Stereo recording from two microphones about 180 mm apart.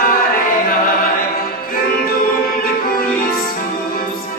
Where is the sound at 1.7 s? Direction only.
55° left (ahead or behind).